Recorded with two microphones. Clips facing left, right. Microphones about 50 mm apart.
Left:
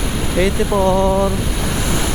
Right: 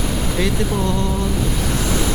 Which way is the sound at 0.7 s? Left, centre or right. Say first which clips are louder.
Left 7 dB; left.